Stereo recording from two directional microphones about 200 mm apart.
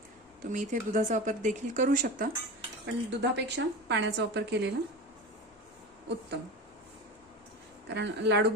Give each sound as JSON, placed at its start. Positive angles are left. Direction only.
{"t": 0.5, "sound": "speech", "side_deg": -40}
{"t": 2.8, "sound": "a woman's voice", "side_deg": -60}
{"t": 7.9, "sound": "a woman's voice", "side_deg": -60}